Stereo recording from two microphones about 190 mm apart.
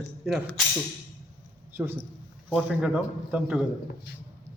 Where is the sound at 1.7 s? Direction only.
10° right (ahead or behind).